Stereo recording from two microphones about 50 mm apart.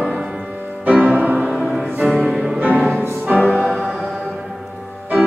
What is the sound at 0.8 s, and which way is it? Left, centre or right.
Music, centre.